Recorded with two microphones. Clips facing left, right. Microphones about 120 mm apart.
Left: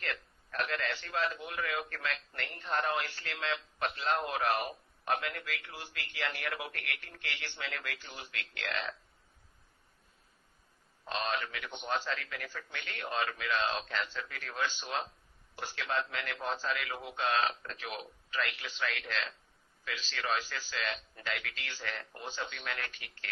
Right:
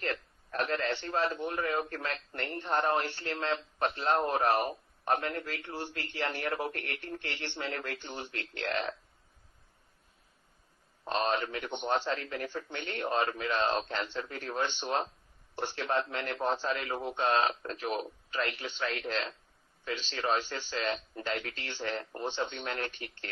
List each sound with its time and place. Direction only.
0.0 s a sound: 35° right (ahead or behind)
1.0 s a man's voice: 30° right (ahead or behind)
6.2 s a man's voice: 40° right (ahead or behind)
6.9 s a man's voice: 30° right (ahead or behind)
11.2 s a man's voice: 30° right (ahead or behind)